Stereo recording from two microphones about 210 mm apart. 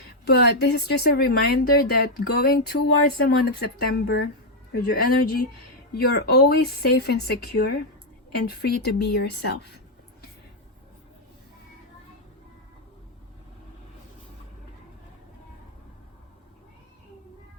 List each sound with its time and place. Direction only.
0.3 s speech: 50° left (ahead or behind)